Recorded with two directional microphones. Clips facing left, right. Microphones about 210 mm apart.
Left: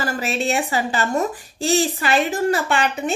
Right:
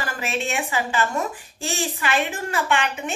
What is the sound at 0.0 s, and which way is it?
A woman's voice, 35° left (ahead or behind).